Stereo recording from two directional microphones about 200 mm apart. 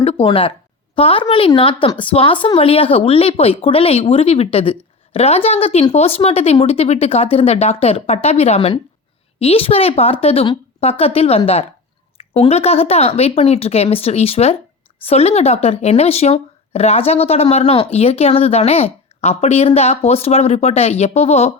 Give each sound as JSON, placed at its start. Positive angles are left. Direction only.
{"t": 0.0, "sound": "a woman's voice", "side_deg": 30}